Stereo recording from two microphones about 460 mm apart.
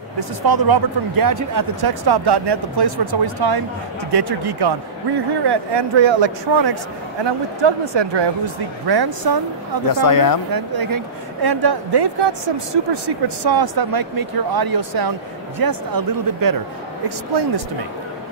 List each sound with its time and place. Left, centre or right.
0.2 s speech: right
10.0 s speech: left
10.5 s speech: right
17.3 s speech: right